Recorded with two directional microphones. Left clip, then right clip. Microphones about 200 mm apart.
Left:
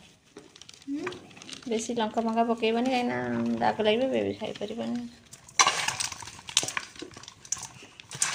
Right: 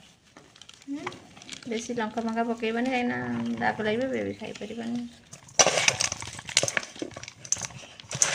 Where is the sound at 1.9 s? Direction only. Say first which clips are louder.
Left 2 dB; 5° left (ahead or behind).